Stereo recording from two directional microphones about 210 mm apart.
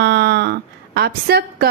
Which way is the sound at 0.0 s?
50° right (ahead or behind).